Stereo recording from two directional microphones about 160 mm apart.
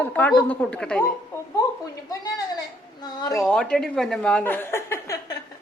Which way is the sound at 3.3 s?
5° left (ahead or behind).